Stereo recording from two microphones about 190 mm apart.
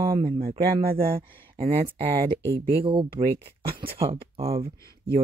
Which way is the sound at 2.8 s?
25° right (ahead or behind).